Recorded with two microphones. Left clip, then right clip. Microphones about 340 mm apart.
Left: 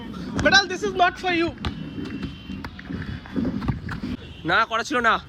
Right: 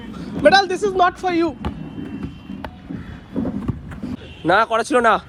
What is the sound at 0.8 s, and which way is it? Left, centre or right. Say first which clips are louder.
Speech: right 4 dB; centre.